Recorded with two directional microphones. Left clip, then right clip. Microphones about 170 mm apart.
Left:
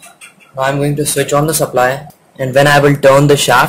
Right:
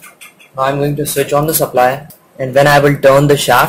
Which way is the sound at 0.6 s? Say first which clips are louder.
Even; centre (ahead or behind).